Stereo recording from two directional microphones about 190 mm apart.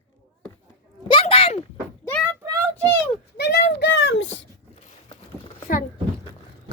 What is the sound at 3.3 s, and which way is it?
Speech, 60° left (ahead or behind).